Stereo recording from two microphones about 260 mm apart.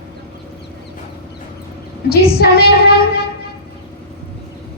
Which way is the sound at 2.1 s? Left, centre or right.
Left.